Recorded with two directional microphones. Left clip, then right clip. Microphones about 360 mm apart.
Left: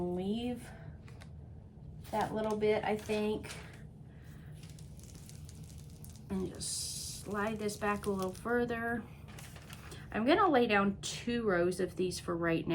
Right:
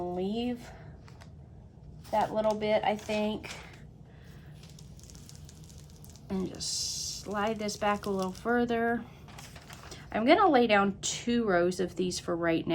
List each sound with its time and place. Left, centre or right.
0.2 s a sound: right
2.1 s speech: right
6.2 s speech: right